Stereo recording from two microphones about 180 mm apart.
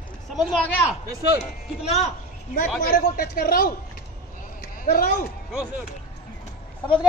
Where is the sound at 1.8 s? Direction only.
40° left (ahead or behind).